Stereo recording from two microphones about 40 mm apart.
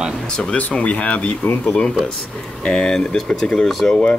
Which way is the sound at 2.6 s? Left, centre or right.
Left.